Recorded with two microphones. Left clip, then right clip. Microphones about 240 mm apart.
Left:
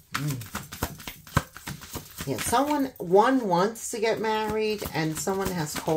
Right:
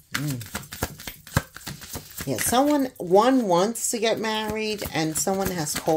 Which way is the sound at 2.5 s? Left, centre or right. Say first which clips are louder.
Right 3 dB; right.